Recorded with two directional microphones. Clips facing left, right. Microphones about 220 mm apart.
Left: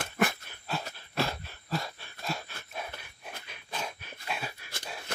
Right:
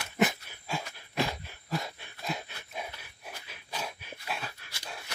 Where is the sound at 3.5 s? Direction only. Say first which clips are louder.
Even; 5° right (ahead or behind).